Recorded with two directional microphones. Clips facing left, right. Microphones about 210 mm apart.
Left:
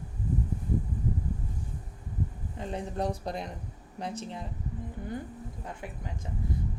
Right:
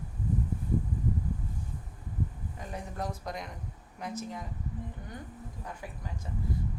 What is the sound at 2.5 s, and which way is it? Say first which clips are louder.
A woman's voice: left 6 dB; 30° left (ahead or behind).